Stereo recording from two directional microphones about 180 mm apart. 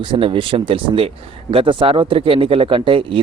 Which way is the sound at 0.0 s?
30° right (ahead or behind).